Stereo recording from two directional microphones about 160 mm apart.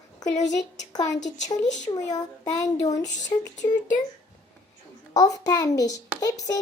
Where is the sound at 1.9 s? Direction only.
30° left (ahead or behind).